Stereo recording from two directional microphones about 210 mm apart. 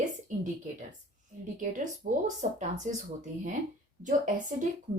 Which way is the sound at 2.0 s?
35° right (ahead or behind).